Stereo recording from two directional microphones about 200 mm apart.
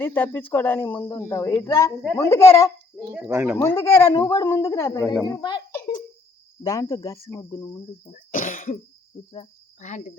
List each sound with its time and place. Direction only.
0.0 s speech: 10° left (ahead or behind)
3.2 s speech: 5° right (ahead or behind)
3.6 s a child's voice: 15° left (ahead or behind)
8.1 s cough: 45° left (ahead or behind)
9.3 s cricket: 30° left (ahead or behind)